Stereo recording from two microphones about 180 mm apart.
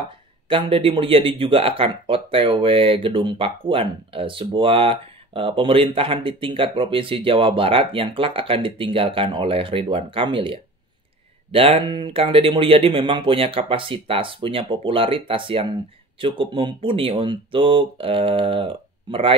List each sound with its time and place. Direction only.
0.5 s speech: 30° right (ahead or behind)